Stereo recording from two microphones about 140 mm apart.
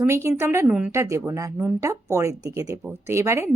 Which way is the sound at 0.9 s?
20° right (ahead or behind).